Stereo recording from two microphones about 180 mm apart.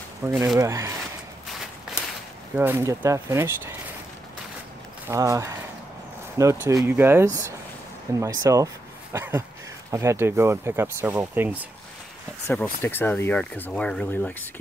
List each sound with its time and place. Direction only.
0.2 s speech: 15° right (ahead or behind)
2.5 s speech: 10° right (ahead or behind)
5.0 s speech: 15° right (ahead or behind)
12.4 s speech: 10° left (ahead or behind)